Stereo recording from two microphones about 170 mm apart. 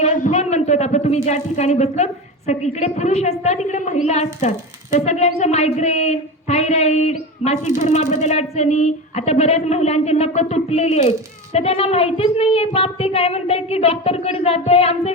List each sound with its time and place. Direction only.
0.0 s a woman's voice: 45° left (ahead or behind)